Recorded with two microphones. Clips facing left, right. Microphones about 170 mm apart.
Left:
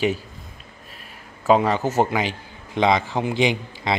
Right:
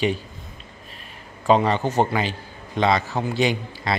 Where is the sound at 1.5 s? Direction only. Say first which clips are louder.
Left 1 dB; 10° left (ahead or behind).